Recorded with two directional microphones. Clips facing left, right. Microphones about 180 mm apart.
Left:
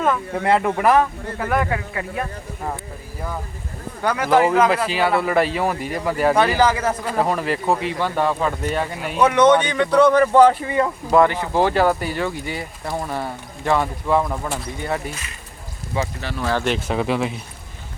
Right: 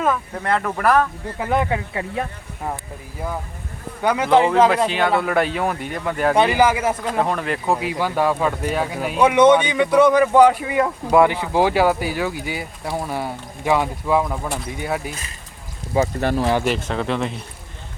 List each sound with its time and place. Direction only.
0.6 s speech: 10° left (ahead or behind)
1.4 s speech: 20° right (ahead or behind)
4.0 s speech: 20° right (ahead or behind)
4.9 s speech: 5° left (ahead or behind)
6.3 s speech: 15° right (ahead or behind)
7.0 s speech: 5° left (ahead or behind); by 10.1 s 10° right (ahead or behind)
10.1 s speech: centre (ahead or behind)
16.0 s speech: 40° right (ahead or behind)
16.4 s speech: 20° right (ahead or behind)
16.9 s speech: 10° left (ahead or behind)